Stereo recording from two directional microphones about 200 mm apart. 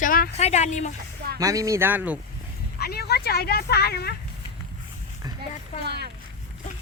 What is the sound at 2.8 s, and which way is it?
Speech, 50° left (ahead or behind).